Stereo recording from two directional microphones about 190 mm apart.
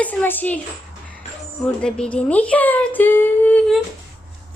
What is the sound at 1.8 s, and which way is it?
Speech, 5° left (ahead or behind).